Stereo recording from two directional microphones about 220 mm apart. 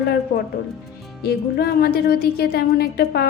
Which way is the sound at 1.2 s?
45° left (ahead or behind).